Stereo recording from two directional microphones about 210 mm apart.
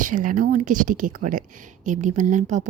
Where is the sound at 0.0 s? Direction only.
40° right (ahead or behind).